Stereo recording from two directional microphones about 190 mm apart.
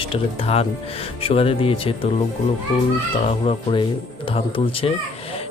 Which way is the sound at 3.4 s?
25° left (ahead or behind).